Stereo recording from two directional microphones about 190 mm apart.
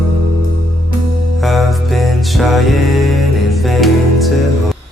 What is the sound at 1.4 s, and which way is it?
Music, centre (ahead or behind).